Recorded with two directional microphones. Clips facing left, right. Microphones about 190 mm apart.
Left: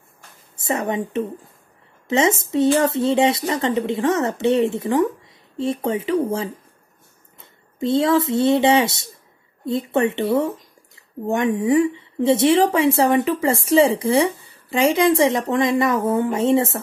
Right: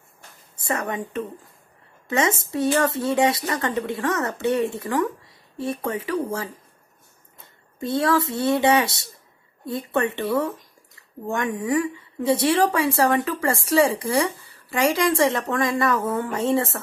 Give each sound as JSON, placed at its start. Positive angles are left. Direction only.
{"t": 0.6, "sound": "a woman's voice", "side_deg": 20}
{"t": 7.8, "sound": "a woman's voice", "side_deg": 25}